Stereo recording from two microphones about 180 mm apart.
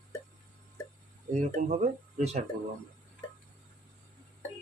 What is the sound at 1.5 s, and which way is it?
Speech, 40° right (ahead or behind).